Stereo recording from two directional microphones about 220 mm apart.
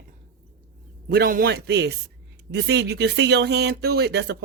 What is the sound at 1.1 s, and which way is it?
Speech, 40° right (ahead or behind).